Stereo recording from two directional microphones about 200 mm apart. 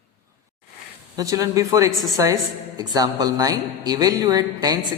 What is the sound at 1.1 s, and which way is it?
A woman's voice, 15° right (ahead or behind).